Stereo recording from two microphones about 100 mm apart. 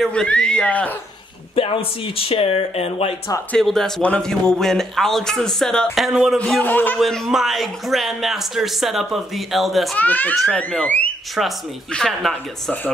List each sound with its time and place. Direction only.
0.0 s speech: 10° left (ahead or behind)
1.5 s speech: 70° left (ahead or behind); by 3.1 s 90° left
3.5 s speech: 5° left (ahead or behind)
6.6 s speech: 20° left (ahead or behind)
7.0 s speech: centre (ahead or behind)
9.9 s speech: 15° left (ahead or behind)
10.3 s speech: centre (ahead or behind)
11.9 s speech: 5° left (ahead or behind)